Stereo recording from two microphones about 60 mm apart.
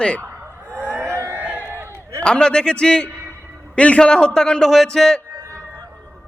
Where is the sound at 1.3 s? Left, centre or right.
Right.